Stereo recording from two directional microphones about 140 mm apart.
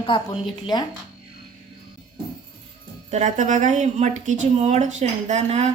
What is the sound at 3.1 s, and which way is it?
Speech, 55° right (ahead or behind).